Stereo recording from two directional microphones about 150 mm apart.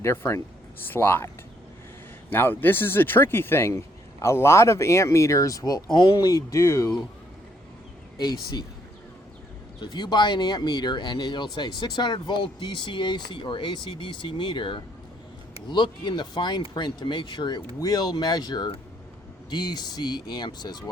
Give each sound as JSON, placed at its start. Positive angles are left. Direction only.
{"t": 0.0, "sound": "speech", "side_deg": 15}
{"t": 2.3, "sound": "speech", "side_deg": 15}
{"t": 9.8, "sound": "speech", "side_deg": 30}